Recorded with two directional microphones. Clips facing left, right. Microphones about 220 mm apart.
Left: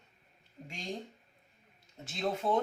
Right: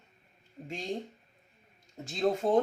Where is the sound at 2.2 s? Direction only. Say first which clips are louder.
Right 5 dB; 45° right (ahead or behind).